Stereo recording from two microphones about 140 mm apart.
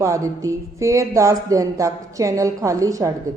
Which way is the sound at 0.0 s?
20° right (ahead or behind).